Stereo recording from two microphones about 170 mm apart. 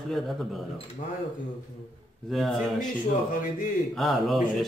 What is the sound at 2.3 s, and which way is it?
Speech, centre (ahead or behind).